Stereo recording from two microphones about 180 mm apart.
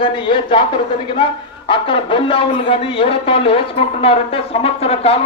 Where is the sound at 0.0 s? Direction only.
25° left (ahead or behind).